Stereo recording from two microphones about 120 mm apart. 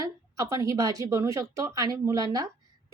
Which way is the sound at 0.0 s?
25° right (ahead or behind).